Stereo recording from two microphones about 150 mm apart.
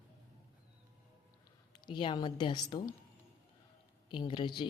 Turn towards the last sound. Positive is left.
turn(degrees=30)  # may be behind; listen again after turning